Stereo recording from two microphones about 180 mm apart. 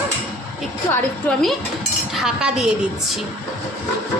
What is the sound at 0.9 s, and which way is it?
A woman's voice, 5° left (ahead or behind).